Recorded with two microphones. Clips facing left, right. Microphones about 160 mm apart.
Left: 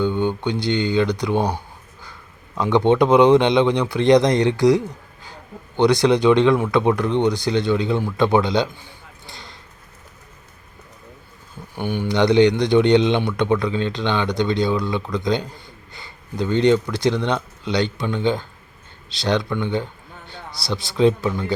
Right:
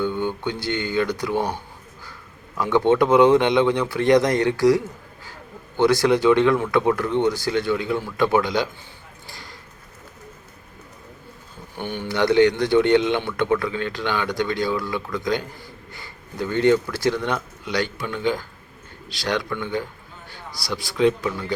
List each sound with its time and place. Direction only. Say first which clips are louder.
0.0 s speech: left 3 dB; 20° left (ahead or behind)
9.2 s a sound: left 1 dB; 25° left (ahead or behind)
11.8 s a man's voice: left 4 dB; 15° left (ahead or behind)